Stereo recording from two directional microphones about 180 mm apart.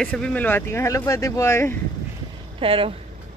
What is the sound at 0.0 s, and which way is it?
Speech, 5° left (ahead or behind).